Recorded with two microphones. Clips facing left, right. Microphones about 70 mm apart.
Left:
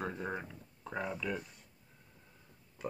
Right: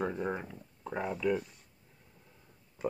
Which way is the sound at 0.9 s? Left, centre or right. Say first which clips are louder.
Right 6 dB; centre.